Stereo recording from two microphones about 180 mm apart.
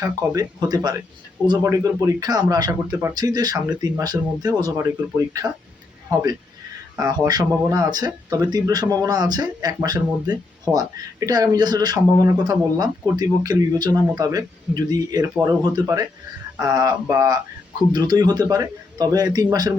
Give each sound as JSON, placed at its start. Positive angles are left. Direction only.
{"t": 0.0, "sound": "speech", "side_deg": -20}
{"t": 6.9, "sound": "speech", "side_deg": -20}